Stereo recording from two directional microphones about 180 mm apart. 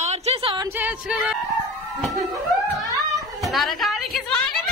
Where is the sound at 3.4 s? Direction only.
Centre (ahead or behind).